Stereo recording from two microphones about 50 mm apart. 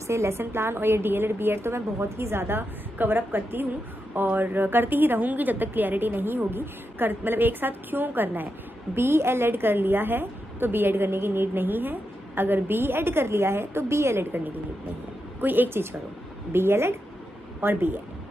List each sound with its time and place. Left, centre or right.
0.0 s a woman's voice: right
0.4 s a woman's voice: right
8.9 s a woman's voice: right
15.4 s a woman's voice: right
16.5 s a woman's voice: right
17.6 s a woman's voice: right